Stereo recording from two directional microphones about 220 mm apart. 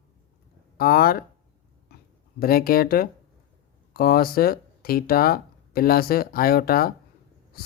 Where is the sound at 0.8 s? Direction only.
40° left (ahead or behind).